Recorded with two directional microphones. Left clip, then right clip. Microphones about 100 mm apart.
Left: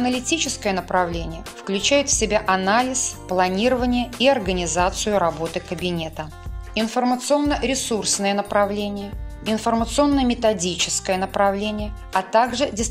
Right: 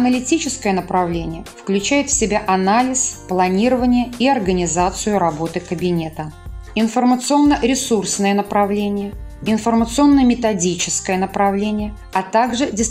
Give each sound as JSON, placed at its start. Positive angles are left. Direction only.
{"t": 0.3, "sound": "a woman's voice", "side_deg": 60}